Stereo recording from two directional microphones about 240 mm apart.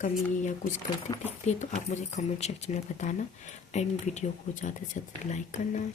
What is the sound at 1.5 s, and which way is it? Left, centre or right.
Speech, left.